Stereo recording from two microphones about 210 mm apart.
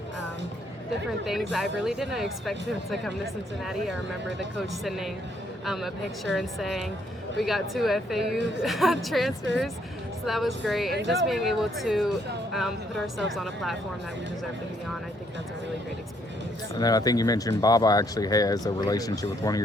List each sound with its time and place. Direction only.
1.2 s speech: centre (ahead or behind)
4.5 s speech: centre (ahead or behind)
16.7 s speech: 20° left (ahead or behind)